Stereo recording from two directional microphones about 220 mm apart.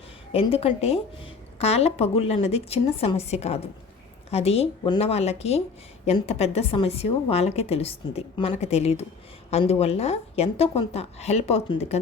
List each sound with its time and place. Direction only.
0.3 s a woman's voice: 25° left (ahead or behind)